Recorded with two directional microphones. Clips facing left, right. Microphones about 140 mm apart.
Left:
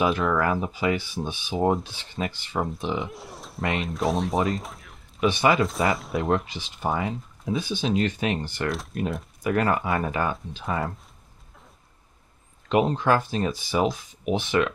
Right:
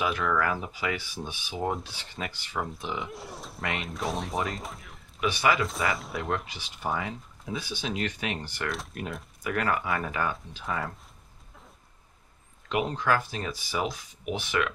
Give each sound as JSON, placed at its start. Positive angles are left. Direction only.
{"t": 0.0, "sound": "speech", "side_deg": 30}
{"t": 3.1, "sound": "speech", "side_deg": 0}
{"t": 5.2, "sound": "speech", "side_deg": 25}
{"t": 8.6, "sound": "speech", "side_deg": 0}
{"t": 9.4, "sound": "speech", "side_deg": 30}
{"t": 12.6, "sound": "speech", "side_deg": 30}